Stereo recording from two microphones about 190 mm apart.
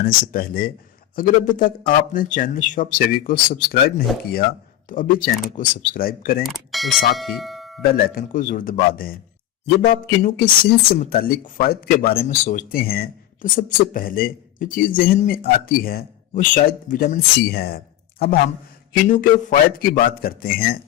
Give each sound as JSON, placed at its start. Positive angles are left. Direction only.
{"t": 0.0, "sound": "speech", "side_deg": 50}
{"t": 6.4, "sound": "speech", "side_deg": 0}
{"t": 7.8, "sound": "speech", "side_deg": 50}
{"t": 15.2, "sound": "speech", "side_deg": 35}
{"t": 15.4, "sound": "speech", "side_deg": 50}